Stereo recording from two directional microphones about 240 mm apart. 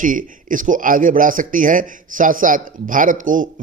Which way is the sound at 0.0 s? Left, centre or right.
Right.